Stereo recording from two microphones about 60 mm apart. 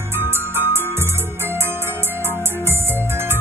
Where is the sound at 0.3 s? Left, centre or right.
Right.